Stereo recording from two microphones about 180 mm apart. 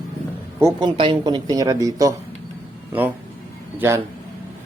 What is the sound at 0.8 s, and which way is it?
Speech, 25° right (ahead or behind).